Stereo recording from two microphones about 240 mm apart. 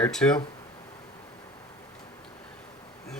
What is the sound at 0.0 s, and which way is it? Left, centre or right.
Speech, centre.